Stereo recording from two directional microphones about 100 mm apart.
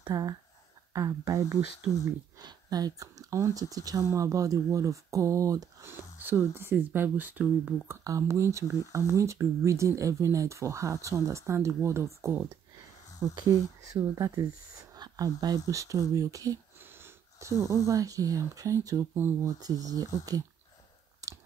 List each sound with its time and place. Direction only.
0.1 s speech: 35° right (ahead or behind)
5.9 s speech: 20° right (ahead or behind)
8.0 s speech: 30° right (ahead or behind)
21.2 s a sound: 35° right (ahead or behind)